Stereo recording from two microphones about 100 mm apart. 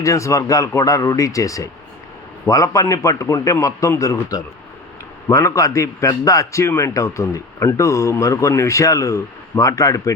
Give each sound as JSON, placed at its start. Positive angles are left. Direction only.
{"t": 0.0, "sound": "a man's voice", "side_deg": 30}